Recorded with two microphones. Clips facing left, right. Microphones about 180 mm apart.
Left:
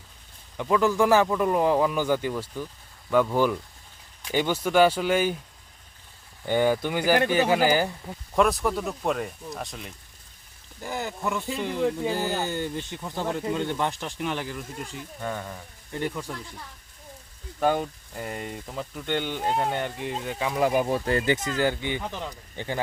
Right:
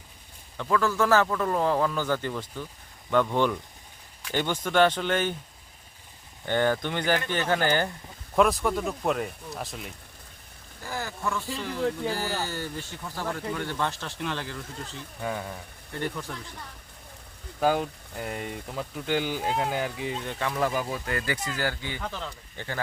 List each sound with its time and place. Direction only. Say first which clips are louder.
0.5 s speech: left 3 dB; 15° left (ahead or behind)
6.4 s speech: left 2 dB; 10° left (ahead or behind)
10.8 s speech: left 2 dB; 20° left (ahead or behind)
15.2 s speech: right 1 dB; 5° right (ahead or behind)
15.9 s speech: left 2 dB; 15° left (ahead or behind)
17.6 s speech: even; centre (ahead or behind)
20.4 s speech: left 3 dB; 15° left (ahead or behind)
21.0 s speech: left 6 dB; 30° left (ahead or behind)